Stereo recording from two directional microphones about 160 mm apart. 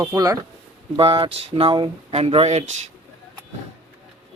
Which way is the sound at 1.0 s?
35° right (ahead or behind).